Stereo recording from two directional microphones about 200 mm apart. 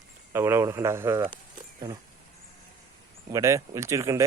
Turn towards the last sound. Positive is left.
turn(degrees=-15)  # may be behind; listen again after turning